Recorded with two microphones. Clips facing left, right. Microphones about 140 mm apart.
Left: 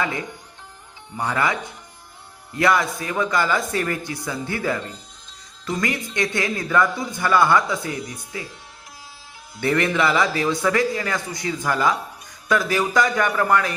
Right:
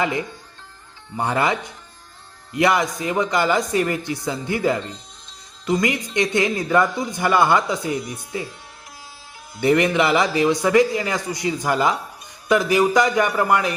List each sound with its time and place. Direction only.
0.0 s speech: 20° right (ahead or behind)
9.6 s speech: 15° right (ahead or behind)